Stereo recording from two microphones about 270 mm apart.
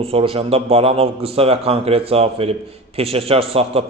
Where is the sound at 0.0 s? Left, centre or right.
Right.